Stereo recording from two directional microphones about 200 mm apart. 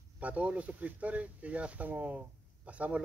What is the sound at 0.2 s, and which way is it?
Speech, 5° right (ahead or behind).